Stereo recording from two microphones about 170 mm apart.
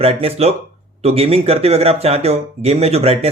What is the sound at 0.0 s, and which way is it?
Speech, 35° right (ahead or behind).